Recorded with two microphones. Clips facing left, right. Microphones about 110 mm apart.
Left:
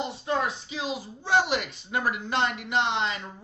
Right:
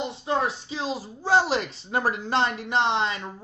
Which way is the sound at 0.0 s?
25° right (ahead or behind).